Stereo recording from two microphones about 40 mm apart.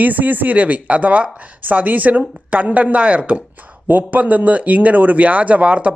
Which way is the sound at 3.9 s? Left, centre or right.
Right.